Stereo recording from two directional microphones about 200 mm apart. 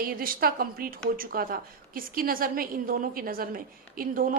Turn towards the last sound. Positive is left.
turn(degrees=-45)  # may be behind; listen again after turning